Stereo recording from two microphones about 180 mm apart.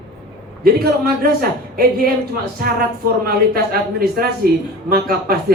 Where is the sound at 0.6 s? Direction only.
55° right (ahead or behind).